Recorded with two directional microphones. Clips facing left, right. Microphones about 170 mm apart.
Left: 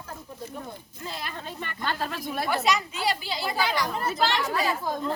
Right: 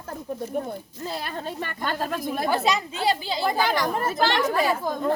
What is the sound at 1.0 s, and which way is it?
Speech, 35° right (ahead or behind).